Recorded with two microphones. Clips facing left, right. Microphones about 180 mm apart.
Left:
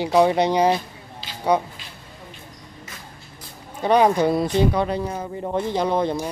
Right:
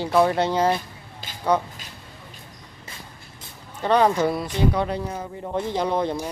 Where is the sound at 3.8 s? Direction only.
15° left (ahead or behind).